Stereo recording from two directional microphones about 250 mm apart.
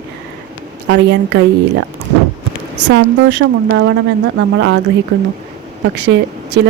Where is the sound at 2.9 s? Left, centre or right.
Right.